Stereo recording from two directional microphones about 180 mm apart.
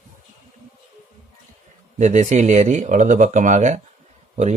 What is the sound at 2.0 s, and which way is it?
Speech, 40° right (ahead or behind).